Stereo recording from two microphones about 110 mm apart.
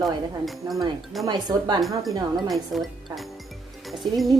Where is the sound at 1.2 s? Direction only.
40° right (ahead or behind).